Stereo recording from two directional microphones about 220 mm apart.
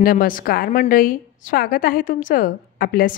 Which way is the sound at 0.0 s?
40° left (ahead or behind).